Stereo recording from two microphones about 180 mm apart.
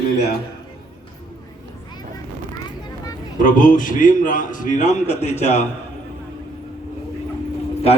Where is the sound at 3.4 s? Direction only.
45° left (ahead or behind).